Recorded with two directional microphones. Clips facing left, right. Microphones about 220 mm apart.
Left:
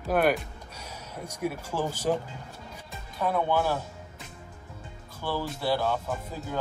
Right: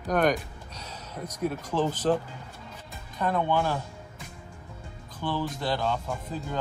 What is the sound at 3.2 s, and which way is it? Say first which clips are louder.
Speech: even; 5° left (ahead or behind).